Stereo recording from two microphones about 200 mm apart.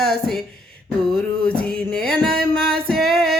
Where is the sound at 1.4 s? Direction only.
5° left (ahead or behind).